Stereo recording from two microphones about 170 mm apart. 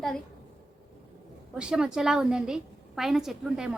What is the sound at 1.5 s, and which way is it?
A woman's voice, 5° right (ahead or behind).